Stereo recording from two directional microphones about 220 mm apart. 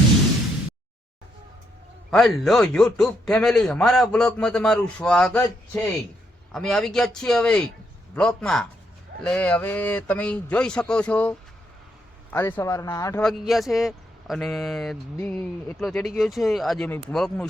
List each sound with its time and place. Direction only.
2.0 s a man's voice: centre (ahead or behind)
13.2 s a man's voice: centre (ahead or behind)